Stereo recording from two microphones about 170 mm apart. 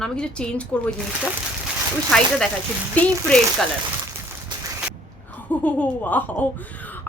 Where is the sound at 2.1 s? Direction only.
5° left (ahead or behind).